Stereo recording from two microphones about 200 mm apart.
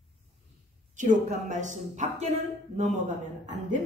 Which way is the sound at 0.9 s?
40° right (ahead or behind).